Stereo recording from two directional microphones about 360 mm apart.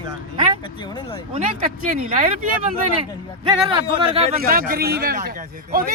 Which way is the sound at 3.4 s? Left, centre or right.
Centre.